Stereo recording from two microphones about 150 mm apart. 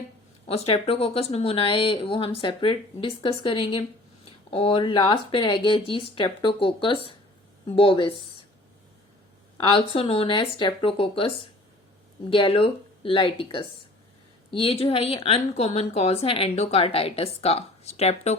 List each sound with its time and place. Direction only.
0.4 s speech: 45° left (ahead or behind)
9.6 s speech: 35° left (ahead or behind)
12.3 s a woman's voice: 35° left (ahead or behind)